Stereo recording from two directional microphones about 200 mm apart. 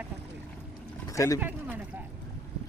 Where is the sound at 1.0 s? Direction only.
15° left (ahead or behind).